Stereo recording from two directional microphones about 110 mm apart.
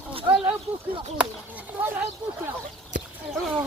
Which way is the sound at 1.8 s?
20° right (ahead or behind).